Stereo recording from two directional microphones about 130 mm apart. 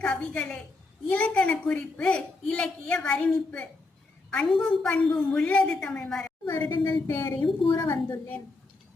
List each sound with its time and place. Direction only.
0.0 s a woman's voice: 10° left (ahead or behind)
6.5 s a woman's voice: 20° left (ahead or behind)
7.4 s a woman's voice: 40° left (ahead or behind)